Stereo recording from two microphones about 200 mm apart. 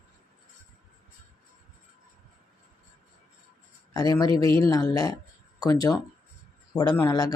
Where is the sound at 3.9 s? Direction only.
20° left (ahead or behind).